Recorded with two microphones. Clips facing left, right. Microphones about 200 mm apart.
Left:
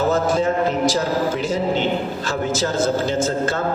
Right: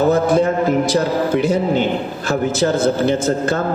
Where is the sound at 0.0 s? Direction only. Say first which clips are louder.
Right 4 dB; 60° right (ahead or behind).